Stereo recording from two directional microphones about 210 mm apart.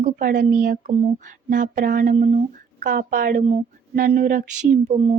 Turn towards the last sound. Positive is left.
turn(degrees=-30)  # may be behind; listen again after turning